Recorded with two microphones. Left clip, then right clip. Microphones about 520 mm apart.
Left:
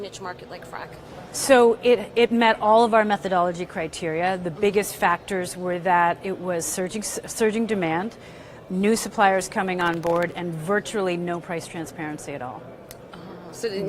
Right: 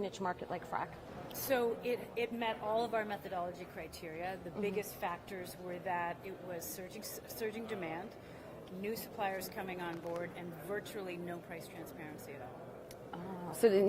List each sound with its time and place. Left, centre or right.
0.0 s speech: right
1.5 s a woman's voice: left
13.6 s speech: right